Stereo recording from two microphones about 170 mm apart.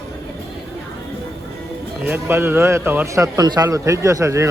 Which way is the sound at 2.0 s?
10° right (ahead or behind).